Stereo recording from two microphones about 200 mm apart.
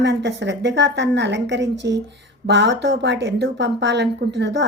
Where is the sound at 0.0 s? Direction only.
60° right (ahead or behind).